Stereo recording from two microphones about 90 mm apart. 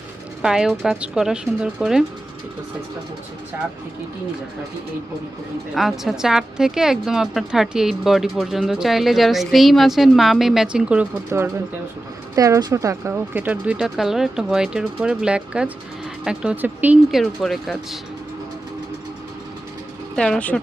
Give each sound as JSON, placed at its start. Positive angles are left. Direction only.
{"t": 0.4, "sound": "a woman's voice", "side_deg": -5}
{"t": 5.7, "sound": "a woman's voice", "side_deg": 0}
{"t": 11.3, "sound": "speech", "side_deg": -30}
{"t": 12.4, "sound": "speech", "side_deg": -40}
{"t": 13.9, "sound": "speech", "side_deg": -5}
{"t": 17.1, "sound": "a woman's voice", "side_deg": 0}
{"t": 20.1, "sound": "a woman's voice", "side_deg": 5}